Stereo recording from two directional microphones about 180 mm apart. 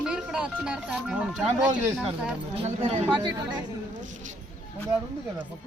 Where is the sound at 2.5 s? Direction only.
30° right (ahead or behind).